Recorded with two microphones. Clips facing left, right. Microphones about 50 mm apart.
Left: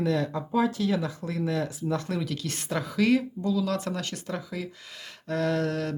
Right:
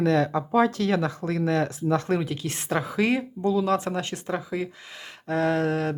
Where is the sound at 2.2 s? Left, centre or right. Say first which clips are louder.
Right 3 dB; right.